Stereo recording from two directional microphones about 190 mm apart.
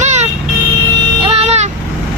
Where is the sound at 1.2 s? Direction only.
35° right (ahead or behind).